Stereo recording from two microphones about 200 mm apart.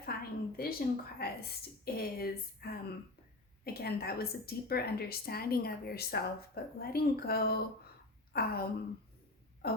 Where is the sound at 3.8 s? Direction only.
50° left (ahead or behind).